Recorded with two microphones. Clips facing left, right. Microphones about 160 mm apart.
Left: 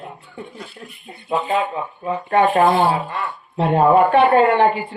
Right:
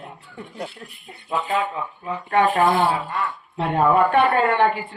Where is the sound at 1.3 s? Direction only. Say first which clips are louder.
Left 3 dB; 25° left (ahead or behind).